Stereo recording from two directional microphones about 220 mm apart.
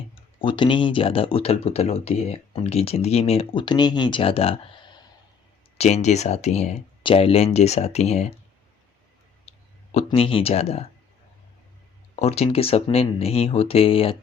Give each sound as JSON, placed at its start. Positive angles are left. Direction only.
{"t": 0.4, "sound": "speech", "side_deg": 20}
{"t": 9.5, "sound": "speech", "side_deg": 30}
{"t": 12.2, "sound": "speech", "side_deg": 30}